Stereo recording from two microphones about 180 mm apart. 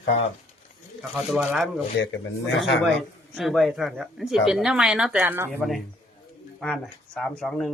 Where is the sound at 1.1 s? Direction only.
Centre (ahead or behind).